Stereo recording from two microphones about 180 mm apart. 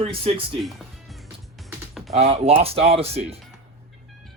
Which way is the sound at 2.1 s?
35° right (ahead or behind).